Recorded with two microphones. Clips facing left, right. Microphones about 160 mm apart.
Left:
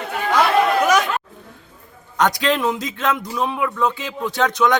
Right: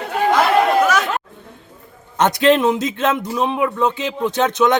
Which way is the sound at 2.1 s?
25° right (ahead or behind).